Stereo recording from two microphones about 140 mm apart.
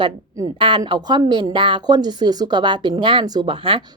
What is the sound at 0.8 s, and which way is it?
Speech, 30° right (ahead or behind).